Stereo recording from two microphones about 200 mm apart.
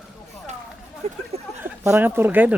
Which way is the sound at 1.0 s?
30° right (ahead or behind).